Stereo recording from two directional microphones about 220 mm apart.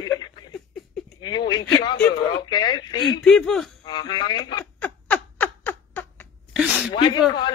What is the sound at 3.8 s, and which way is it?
Speech, 20° left (ahead or behind).